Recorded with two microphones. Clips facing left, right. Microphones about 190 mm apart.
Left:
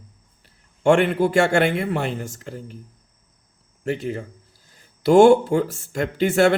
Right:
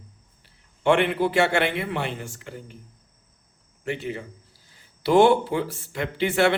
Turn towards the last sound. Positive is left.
turn(degrees=45)  # may be behind; listen again after turning